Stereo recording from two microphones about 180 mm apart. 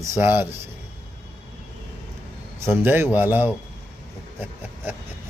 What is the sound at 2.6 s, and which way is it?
Speech, 10° right (ahead or behind).